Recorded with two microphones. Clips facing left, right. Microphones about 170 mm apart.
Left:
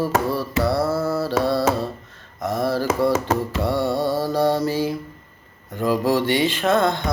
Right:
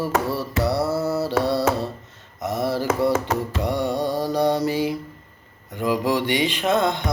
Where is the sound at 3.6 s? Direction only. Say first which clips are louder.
Left 2 dB; 15° right (ahead or behind).